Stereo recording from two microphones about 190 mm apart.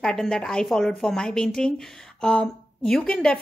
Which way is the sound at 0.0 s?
5° left (ahead or behind).